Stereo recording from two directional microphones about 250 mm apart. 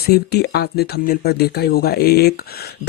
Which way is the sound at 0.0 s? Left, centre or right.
Left.